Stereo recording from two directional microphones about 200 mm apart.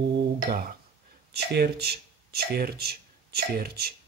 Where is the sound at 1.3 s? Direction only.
55° right (ahead or behind).